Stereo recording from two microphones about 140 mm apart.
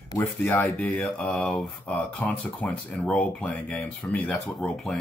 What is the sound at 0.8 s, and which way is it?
Speech, centre (ahead or behind).